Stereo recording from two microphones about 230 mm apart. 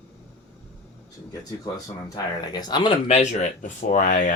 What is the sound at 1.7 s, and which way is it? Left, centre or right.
Speech, centre.